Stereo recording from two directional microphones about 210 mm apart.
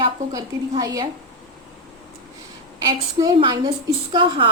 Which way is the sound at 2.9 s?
20° right (ahead or behind).